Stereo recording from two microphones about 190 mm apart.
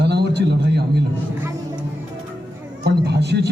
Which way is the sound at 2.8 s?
60° right (ahead or behind).